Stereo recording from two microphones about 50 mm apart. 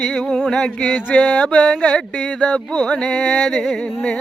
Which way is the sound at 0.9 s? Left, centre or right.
Left.